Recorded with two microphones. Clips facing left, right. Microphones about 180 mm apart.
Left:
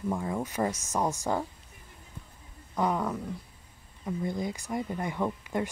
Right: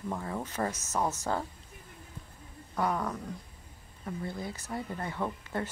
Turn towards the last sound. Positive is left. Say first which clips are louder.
# left 4 dB
turn(degrees=15)  # may be behind; listen again after turning